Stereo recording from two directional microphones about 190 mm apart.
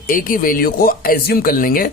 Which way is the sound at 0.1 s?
45° left (ahead or behind).